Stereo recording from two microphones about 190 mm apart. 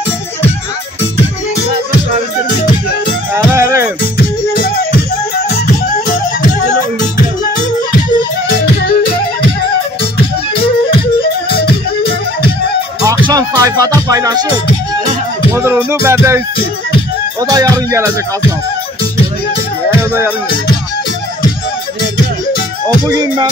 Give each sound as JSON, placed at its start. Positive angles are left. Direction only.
{"t": 3.5, "sound": "music", "side_deg": -15}
{"t": 8.8, "sound": "music", "side_deg": 55}
{"t": 10.5, "sound": "music", "side_deg": 30}
{"t": 13.3, "sound": "music", "side_deg": -20}
{"t": 15.5, "sound": "music", "side_deg": -15}
{"t": 20.0, "sound": "music", "side_deg": -10}
{"t": 23.0, "sound": "music", "side_deg": -20}